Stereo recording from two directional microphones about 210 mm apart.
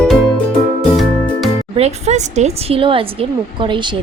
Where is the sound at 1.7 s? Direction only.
30° right (ahead or behind).